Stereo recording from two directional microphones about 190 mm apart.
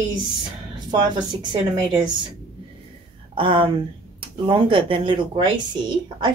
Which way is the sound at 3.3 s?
30° right (ahead or behind).